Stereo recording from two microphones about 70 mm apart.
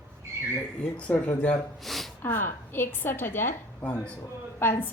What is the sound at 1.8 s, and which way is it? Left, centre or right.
Gasp, centre.